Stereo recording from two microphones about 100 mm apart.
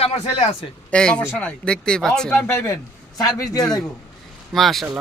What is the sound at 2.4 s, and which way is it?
Speech, 25° left (ahead or behind).